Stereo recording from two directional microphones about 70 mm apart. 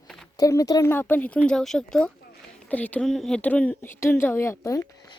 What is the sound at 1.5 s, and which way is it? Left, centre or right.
Speech, centre.